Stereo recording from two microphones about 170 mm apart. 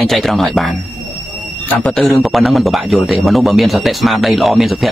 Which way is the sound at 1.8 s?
5° left (ahead or behind).